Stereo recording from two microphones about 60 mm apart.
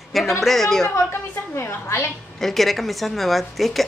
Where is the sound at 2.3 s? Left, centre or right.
Centre.